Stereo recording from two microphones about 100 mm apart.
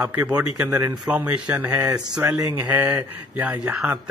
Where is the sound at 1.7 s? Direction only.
35° right (ahead or behind).